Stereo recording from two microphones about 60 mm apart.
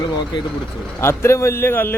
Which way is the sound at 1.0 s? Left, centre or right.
Left.